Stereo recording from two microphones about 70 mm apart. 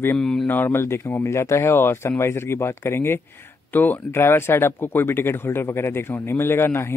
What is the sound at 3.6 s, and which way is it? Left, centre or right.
Speech, left.